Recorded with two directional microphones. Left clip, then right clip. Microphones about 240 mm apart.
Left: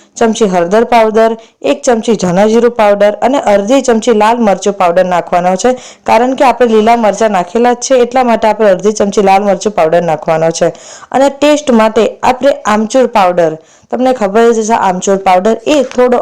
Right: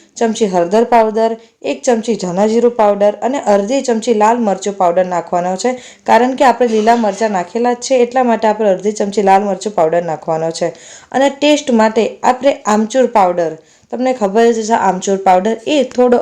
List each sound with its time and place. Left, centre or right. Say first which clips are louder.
0.2 s speech: left 4 dB; centre